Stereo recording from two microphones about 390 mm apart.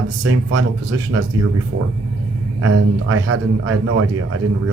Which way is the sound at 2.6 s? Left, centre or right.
Right.